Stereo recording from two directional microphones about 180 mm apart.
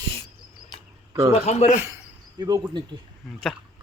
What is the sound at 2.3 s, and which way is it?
Speech, 20° right (ahead or behind).